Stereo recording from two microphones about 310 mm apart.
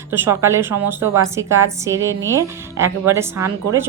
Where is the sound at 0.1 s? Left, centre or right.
Centre.